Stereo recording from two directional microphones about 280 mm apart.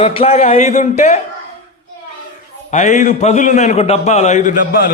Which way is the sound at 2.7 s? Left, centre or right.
Left.